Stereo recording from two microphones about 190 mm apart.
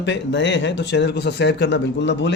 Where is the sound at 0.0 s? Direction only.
70° left (ahead or behind).